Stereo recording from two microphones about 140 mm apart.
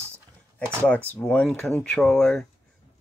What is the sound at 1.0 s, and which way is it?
Speech, 10° left (ahead or behind).